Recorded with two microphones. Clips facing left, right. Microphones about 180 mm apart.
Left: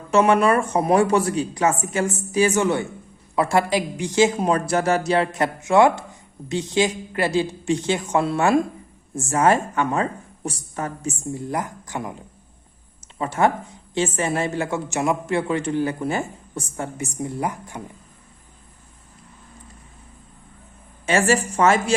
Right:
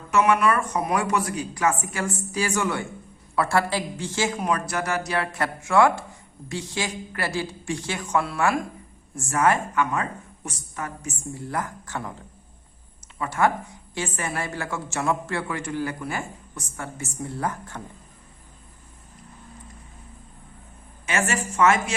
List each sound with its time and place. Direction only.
0.1 s a woman's voice: 30° left (ahead or behind)
13.1 s a woman's voice: 25° left (ahead or behind)
21.1 s a woman's voice: 30° left (ahead or behind)